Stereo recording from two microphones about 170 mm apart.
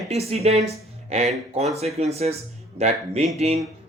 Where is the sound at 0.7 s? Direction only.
40° right (ahead or behind).